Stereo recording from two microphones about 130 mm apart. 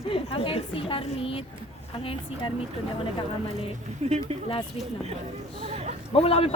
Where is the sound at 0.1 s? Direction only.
45° left (ahead or behind).